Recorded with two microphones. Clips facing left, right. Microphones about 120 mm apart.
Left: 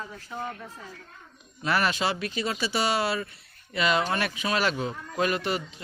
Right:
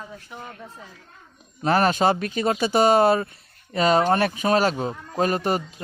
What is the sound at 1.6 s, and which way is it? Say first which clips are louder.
Speech: right 7 dB; 40° right (ahead or behind).